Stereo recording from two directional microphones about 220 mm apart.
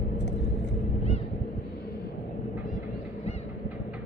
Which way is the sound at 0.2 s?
50° left (ahead or behind).